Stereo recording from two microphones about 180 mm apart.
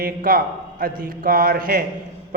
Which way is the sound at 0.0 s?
55° right (ahead or behind).